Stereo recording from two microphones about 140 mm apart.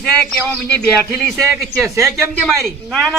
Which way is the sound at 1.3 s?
20° right (ahead or behind).